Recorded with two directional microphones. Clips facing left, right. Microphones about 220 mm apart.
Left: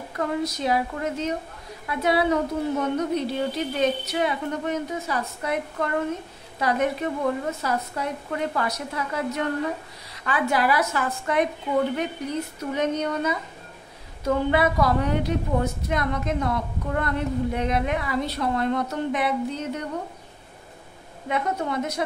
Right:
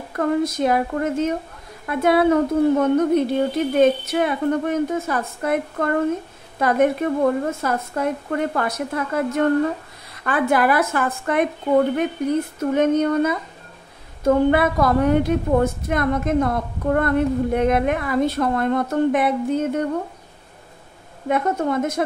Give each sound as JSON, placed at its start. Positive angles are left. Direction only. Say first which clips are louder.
{"t": 0.1, "sound": "a woman's voice", "louder": "right 6 dB", "side_deg": -50}
{"t": 21.3, "sound": "a woman's voice", "louder": "right 6 dB", "side_deg": -50}